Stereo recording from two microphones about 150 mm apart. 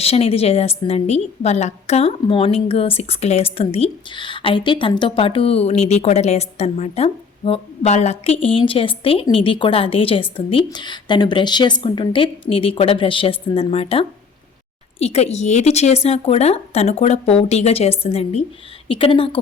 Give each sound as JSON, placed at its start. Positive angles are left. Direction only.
{"t": 0.0, "sound": "a woman's voice", "side_deg": 40}